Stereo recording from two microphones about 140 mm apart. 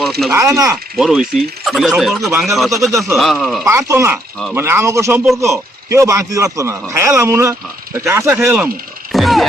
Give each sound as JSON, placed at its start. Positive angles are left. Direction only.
{"t": 0.0, "sound": "speech", "side_deg": 0}
{"t": 0.3, "sound": "a man's voice", "side_deg": -20}
{"t": 0.9, "sound": "speech", "side_deg": -5}
{"t": 3.6, "sound": "a man's voice", "side_deg": -20}